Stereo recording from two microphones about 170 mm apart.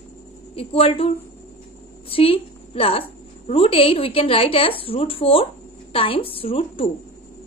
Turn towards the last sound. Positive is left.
turn(degrees=35)  # may be behind; listen again after turning